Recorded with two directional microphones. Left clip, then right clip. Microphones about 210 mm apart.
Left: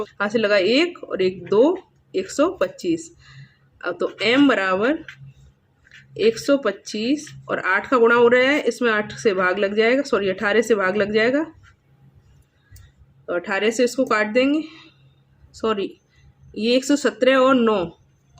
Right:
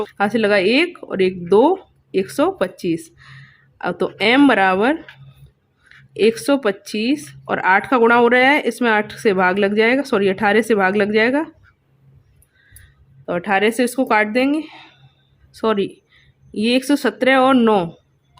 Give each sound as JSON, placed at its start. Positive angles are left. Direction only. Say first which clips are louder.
{"t": 0.0, "sound": "speech", "louder": "right 3 dB", "side_deg": -35}
{"t": 6.1, "sound": "speech", "louder": "right 2 dB", "side_deg": -35}
{"t": 13.2, "sound": "speech", "louder": "right 4 dB", "side_deg": -40}